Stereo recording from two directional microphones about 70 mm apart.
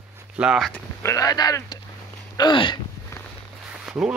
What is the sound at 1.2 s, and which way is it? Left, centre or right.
Speech, left.